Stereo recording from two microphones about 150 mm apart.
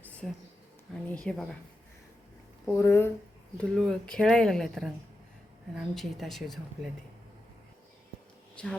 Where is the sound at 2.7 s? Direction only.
15° left (ahead or behind).